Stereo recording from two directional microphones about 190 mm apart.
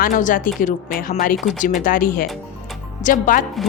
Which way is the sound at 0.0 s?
45° left (ahead or behind).